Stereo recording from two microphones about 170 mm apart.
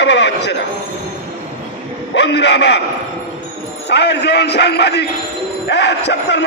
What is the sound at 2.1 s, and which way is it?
Speech, 90° left.